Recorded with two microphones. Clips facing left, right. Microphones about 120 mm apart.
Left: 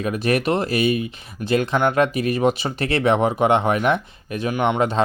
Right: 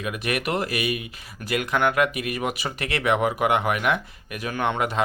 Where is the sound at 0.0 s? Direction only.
35° left (ahead or behind).